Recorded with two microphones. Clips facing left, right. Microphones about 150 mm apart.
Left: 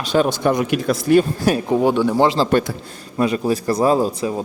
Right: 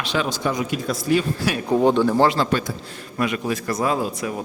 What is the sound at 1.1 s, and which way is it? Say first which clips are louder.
Speech: left 9 dB; 45° left (ahead or behind).